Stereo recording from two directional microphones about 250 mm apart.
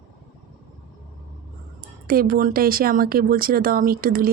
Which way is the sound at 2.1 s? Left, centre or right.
Right.